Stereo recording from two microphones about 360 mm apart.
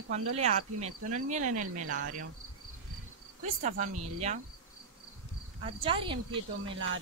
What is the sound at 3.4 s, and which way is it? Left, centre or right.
Speech, centre.